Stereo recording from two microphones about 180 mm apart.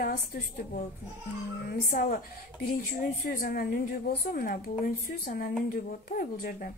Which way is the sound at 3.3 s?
55° left (ahead or behind).